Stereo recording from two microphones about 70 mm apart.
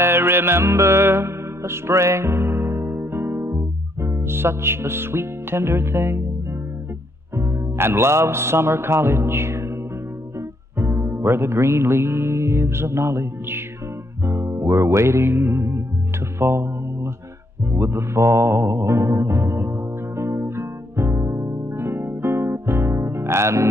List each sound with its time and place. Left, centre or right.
0.0 s music: right
7.3 s speech: right
10.8 s music: right